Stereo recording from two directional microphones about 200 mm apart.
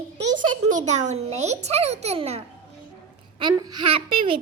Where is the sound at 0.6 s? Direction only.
40° right (ahead or behind).